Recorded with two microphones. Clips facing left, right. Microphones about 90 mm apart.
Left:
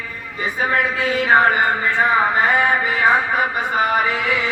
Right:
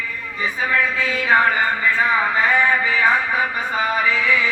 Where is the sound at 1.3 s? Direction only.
25° left (ahead or behind).